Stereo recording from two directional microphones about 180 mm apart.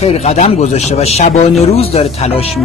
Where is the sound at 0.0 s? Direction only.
35° left (ahead or behind).